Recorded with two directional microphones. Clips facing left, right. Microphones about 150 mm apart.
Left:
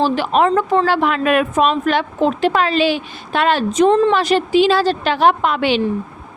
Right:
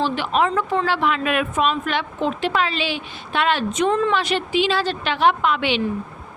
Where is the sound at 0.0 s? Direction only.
40° left (ahead or behind).